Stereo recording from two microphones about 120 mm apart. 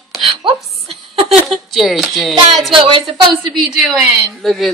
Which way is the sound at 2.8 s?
45° right (ahead or behind).